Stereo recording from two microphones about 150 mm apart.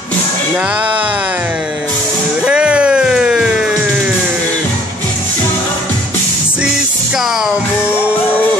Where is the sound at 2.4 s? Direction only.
5° right (ahead or behind).